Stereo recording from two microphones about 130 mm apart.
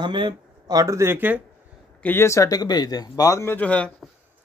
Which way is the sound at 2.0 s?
20° left (ahead or behind).